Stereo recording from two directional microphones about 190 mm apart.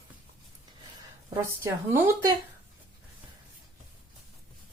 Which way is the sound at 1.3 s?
15° right (ahead or behind).